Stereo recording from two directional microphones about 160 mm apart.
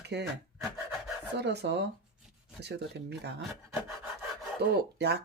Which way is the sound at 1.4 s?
90° right.